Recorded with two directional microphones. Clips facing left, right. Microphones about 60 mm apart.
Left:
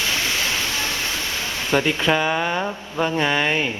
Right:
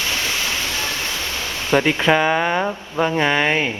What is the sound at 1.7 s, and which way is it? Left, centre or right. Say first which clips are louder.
Speech: right 3 dB; centre.